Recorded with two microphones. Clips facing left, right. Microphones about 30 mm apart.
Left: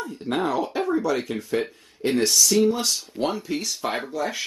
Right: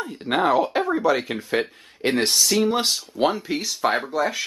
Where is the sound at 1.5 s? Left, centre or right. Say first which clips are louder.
Right 3 dB; right.